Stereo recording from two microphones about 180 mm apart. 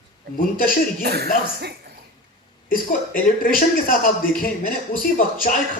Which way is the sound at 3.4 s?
50° left (ahead or behind).